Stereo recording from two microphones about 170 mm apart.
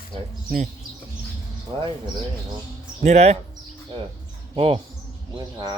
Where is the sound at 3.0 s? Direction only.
40° right (ahead or behind).